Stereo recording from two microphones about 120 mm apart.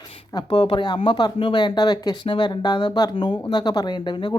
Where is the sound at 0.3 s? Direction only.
40° left (ahead or behind).